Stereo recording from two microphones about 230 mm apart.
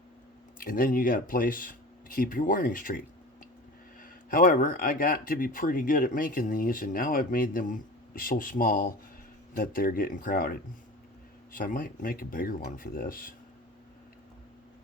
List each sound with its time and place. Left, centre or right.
0.6 s speech: left
4.3 s speech: left